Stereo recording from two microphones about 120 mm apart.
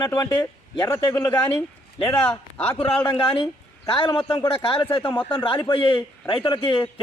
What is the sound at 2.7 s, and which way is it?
A man's voice, 40° left (ahead or behind).